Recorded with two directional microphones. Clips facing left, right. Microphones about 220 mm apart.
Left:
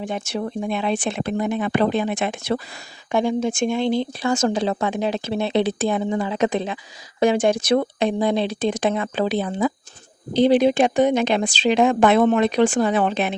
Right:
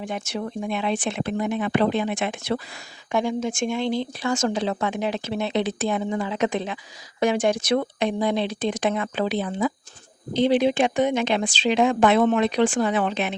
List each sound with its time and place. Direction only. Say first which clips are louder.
0.0 s speech: left 3 dB; 30° left (ahead or behind)